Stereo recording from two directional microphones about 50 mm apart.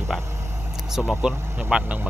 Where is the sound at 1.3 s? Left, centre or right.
Right.